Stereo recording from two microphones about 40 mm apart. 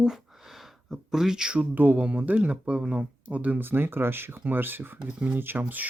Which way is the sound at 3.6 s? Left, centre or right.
Right.